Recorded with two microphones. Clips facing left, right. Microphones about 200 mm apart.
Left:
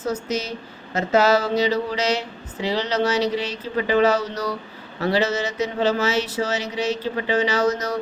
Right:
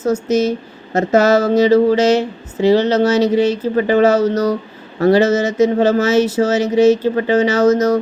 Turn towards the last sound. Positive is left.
turn(degrees=-45)  # may be behind; listen again after turning